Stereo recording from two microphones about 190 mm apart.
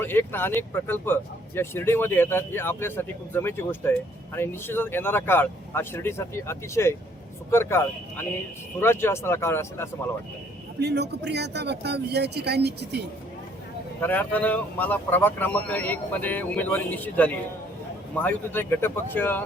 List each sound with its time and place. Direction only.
0.0 s speech: 10° left (ahead or behind)
10.8 s speech: 60° right (ahead or behind)
14.0 s speech: 10° left (ahead or behind)